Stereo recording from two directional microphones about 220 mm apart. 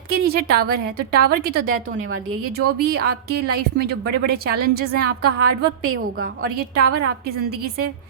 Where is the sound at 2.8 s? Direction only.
45° right (ahead or behind).